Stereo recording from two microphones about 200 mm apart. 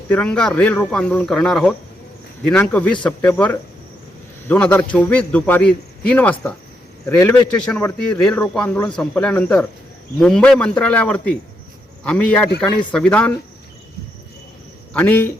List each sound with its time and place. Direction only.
0.1 s a man's voice: 5° left (ahead or behind)
14.9 s a man's voice: 10° left (ahead or behind)